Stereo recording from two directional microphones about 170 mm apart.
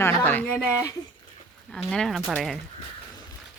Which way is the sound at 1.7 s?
5° left (ahead or behind).